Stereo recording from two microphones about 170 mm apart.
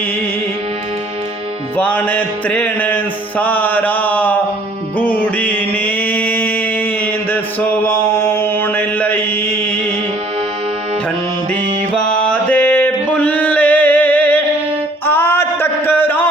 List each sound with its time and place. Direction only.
1.7 s music: 10° left (ahead or behind)
5.2 s mantra: 10° left (ahead or behind)
11.9 s music: 5° left (ahead or behind)
15.0 s a sound: 15° left (ahead or behind)